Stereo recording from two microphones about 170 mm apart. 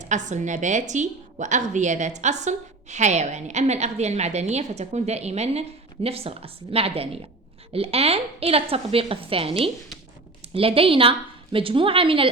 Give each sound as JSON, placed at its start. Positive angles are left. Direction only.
{"t": 0.0, "sound": "a woman's voice", "side_deg": -45}